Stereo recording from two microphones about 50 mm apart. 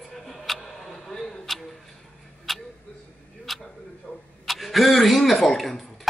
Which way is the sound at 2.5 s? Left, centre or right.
Centre.